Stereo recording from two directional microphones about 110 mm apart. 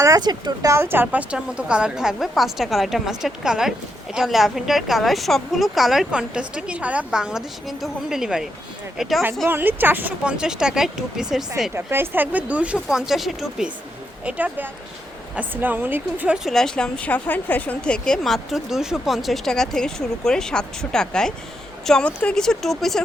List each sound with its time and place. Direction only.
0.0 s speech: 35° right (ahead or behind)
0.7 s a woman's voice: 20° right (ahead or behind); by 9.2 s centre (ahead or behind)
9.5 s speech: 20° right (ahead or behind)
11.7 s speech: 20° right (ahead or behind); by 13.7 s centre (ahead or behind)
14.3 s a woman's voice: 15° right (ahead or behind); by 23.0 s centre (ahead or behind)